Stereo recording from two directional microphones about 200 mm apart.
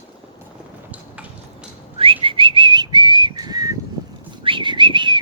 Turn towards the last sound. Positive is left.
turn(degrees=-25)  # may be behind; listen again after turning